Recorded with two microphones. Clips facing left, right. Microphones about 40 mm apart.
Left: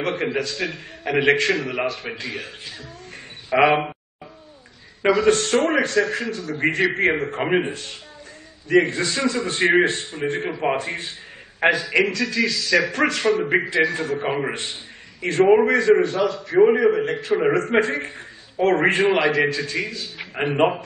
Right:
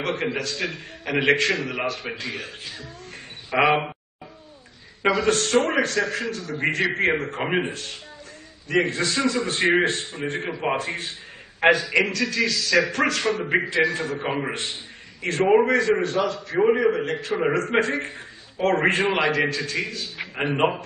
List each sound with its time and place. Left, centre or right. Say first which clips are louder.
0.0 s a man's voice: left 2 dB; centre
5.0 s a man's voice: left 3 dB; centre
8.6 s a man's voice: left 4 dB; centre